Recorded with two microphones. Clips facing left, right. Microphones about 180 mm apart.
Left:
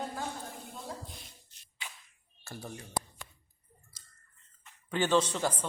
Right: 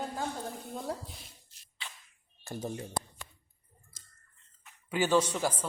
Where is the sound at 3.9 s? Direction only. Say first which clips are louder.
Right 2 dB; 50° right (ahead or behind).